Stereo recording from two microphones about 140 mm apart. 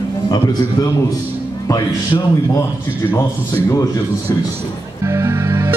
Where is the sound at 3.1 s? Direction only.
20° left (ahead or behind).